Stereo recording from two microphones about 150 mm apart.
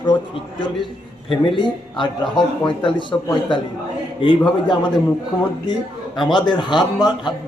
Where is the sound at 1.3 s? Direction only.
35° left (ahead or behind).